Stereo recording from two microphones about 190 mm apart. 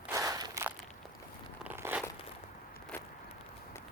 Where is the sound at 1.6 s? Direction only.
10° right (ahead or behind).